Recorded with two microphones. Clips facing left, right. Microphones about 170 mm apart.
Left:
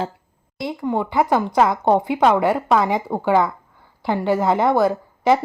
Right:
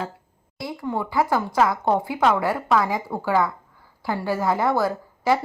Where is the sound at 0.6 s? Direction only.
20° left (ahead or behind).